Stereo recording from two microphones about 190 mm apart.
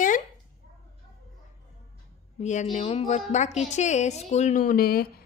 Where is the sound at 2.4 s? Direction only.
40° left (ahead or behind).